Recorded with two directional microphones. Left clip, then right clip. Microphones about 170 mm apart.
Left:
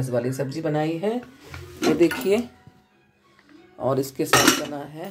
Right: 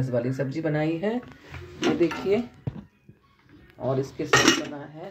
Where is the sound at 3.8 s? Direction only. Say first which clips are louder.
Left 4 dB; 30° left (ahead or behind).